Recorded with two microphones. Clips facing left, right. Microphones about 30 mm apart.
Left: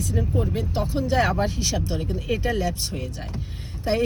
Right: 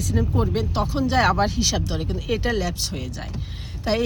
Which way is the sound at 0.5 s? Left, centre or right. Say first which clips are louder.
Right 2 dB; right.